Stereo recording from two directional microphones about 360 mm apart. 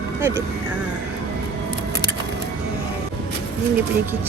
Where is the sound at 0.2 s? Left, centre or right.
Centre.